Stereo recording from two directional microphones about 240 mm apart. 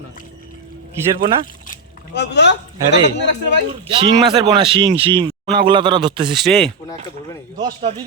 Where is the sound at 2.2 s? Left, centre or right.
Left.